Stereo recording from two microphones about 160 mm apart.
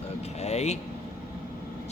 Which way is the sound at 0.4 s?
45° left (ahead or behind).